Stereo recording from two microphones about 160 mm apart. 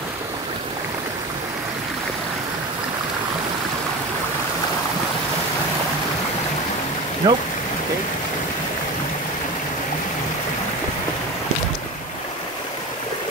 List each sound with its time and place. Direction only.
7.2 s speech: 30° right (ahead or behind)